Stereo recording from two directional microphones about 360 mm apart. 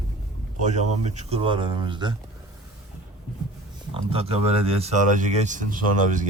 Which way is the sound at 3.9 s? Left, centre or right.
Centre.